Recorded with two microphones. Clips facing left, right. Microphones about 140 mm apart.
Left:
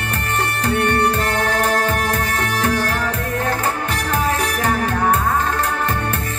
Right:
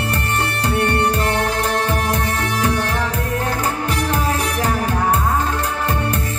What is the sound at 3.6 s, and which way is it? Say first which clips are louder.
Music: right 1 dB; 35° right (ahead or behind).